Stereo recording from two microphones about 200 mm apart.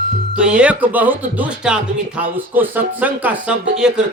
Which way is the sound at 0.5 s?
5° right (ahead or behind).